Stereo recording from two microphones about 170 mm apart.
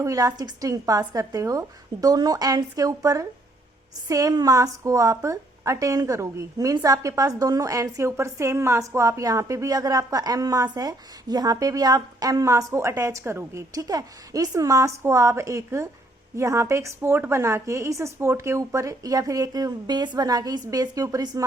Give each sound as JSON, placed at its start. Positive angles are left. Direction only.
{"t": 0.0, "sound": "a woman's voice", "side_deg": -20}